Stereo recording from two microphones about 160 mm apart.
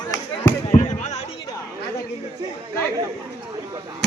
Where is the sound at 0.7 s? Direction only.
45° left (ahead or behind).